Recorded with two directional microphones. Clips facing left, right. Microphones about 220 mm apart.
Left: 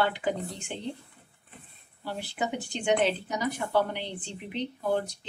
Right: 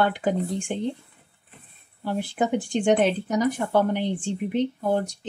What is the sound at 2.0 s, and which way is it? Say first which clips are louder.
Speech: right 7 dB; 50° right (ahead or behind).